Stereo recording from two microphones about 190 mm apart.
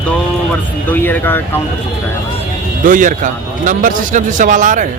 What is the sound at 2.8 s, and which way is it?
A man's voice, 45° right (ahead or behind).